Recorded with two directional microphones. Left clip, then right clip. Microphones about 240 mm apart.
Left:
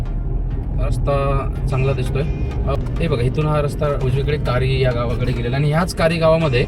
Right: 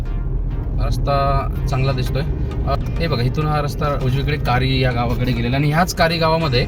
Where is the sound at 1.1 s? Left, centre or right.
Right.